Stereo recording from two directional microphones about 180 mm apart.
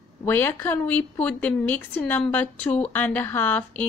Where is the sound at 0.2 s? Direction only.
10° left (ahead or behind).